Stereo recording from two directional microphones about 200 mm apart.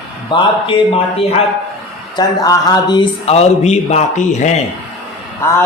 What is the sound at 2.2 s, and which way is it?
A man's voice, 20° left (ahead or behind).